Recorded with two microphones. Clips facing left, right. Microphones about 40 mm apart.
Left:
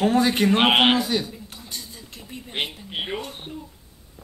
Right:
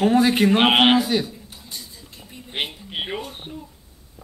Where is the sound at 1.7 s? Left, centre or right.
Left.